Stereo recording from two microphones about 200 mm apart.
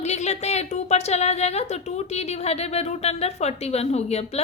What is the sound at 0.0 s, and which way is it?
A woman's voice, 35° left (ahead or behind).